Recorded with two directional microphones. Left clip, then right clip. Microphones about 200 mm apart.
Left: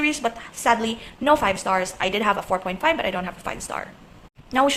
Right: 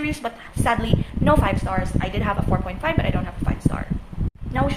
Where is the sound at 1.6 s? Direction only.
30° left (ahead or behind).